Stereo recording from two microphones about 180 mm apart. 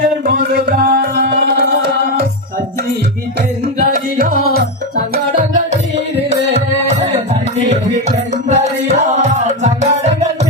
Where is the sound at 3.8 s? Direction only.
50° right (ahead or behind).